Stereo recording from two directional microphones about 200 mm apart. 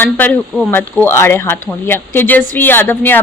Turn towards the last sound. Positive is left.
turn(degrees=10)  # may be behind; listen again after turning